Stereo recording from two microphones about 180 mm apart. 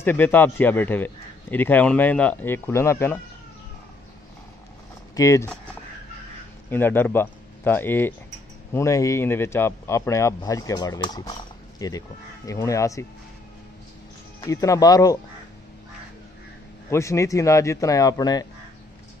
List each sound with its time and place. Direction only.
0.0 s a man's voice: 10° left (ahead or behind)
5.1 s speech: 20° left (ahead or behind)
6.7 s a man's voice: 10° left (ahead or behind)
14.4 s speech: 20° left (ahead or behind)
16.9 s a man's voice: 15° left (ahead or behind)